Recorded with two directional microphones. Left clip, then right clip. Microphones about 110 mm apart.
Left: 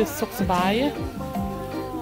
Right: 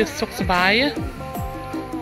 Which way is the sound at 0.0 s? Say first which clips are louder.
Right 2 dB; 25° left (ahead or behind).